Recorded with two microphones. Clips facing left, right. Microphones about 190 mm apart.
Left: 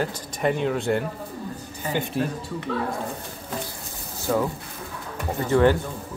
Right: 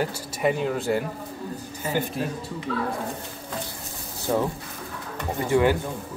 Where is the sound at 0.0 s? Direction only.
5° right (ahead or behind).